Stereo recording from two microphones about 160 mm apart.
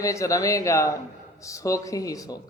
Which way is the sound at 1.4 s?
20° left (ahead or behind).